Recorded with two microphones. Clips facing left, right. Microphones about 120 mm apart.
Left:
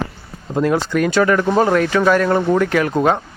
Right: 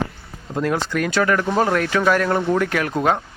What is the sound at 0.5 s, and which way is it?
Speech, 5° left (ahead or behind).